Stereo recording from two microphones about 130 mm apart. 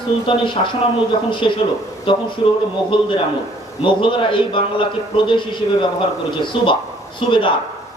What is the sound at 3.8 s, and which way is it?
Speech, 40° left (ahead or behind).